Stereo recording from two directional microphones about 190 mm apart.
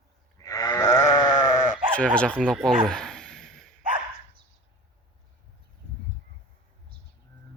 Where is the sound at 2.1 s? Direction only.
5° left (ahead or behind).